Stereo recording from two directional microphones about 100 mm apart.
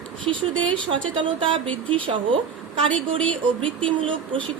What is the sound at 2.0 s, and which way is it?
Speech, 60° right (ahead or behind).